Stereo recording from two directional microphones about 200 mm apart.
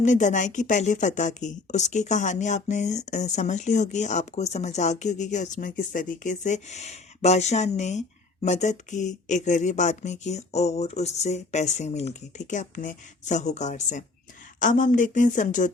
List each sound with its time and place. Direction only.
0.0 s speech: 35° left (ahead or behind)